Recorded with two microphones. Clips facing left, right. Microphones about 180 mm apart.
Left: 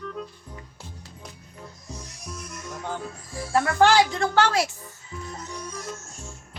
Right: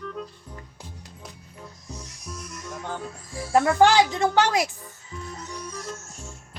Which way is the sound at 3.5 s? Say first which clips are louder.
Right 1 dB; 15° right (ahead or behind).